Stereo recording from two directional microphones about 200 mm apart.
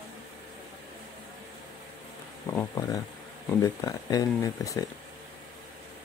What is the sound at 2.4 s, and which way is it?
Speech, 15° left (ahead or behind).